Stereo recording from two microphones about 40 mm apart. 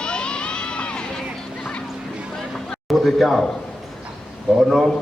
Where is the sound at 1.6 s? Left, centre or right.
Left.